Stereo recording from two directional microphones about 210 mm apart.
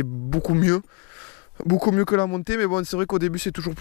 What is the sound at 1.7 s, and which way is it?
Speech, 20° left (ahead or behind).